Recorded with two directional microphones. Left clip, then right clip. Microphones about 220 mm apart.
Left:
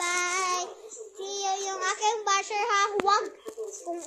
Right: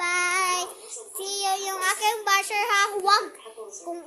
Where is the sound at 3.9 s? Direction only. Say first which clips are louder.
Right 1 dB; 5° right (ahead or behind).